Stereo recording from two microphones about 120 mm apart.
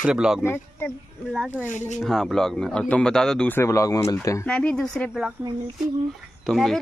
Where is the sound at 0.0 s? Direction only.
5° right (ahead or behind).